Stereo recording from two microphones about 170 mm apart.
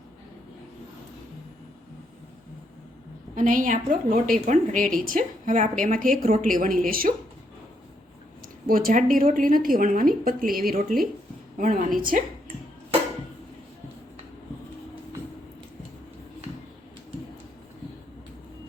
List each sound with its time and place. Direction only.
3.3 s a woman's voice: 50° right (ahead or behind)
8.6 s a woman's voice: 55° right (ahead or behind)